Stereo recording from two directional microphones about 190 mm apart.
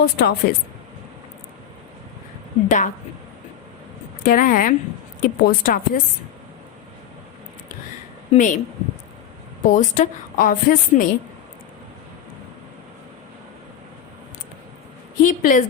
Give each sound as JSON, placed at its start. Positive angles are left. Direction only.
{"t": 0.0, "sound": "a woman's voice", "side_deg": 55}
{"t": 2.6, "sound": "a woman's voice", "side_deg": 40}
{"t": 4.2, "sound": "a woman's voice", "side_deg": 45}
{"t": 8.3, "sound": "a woman's voice", "side_deg": 40}
{"t": 9.6, "sound": "a woman's voice", "side_deg": 40}
{"t": 15.2, "sound": "a woman's voice", "side_deg": 45}